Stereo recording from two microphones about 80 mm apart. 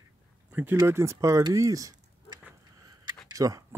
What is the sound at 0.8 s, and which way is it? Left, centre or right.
Speech, right.